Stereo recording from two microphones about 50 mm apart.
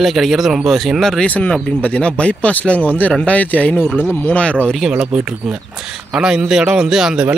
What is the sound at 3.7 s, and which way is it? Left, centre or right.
Speech, left.